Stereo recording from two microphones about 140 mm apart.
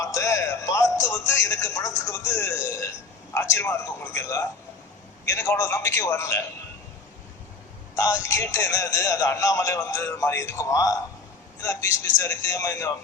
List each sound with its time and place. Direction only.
0.0 s music: 20° left (ahead or behind)
2.0 s speech: 20° left (ahead or behind)
7.9 s speech: 20° left (ahead or behind)